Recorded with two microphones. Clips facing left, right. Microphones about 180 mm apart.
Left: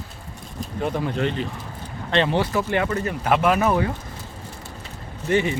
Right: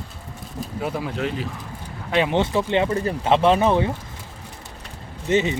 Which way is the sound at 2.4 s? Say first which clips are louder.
Right 2 dB; 25° right (ahead or behind).